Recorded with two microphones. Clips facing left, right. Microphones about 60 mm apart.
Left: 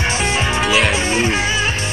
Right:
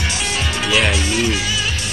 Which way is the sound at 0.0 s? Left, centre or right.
Left.